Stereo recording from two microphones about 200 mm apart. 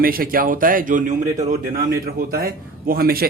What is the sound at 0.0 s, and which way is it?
Speech, 45° right (ahead or behind).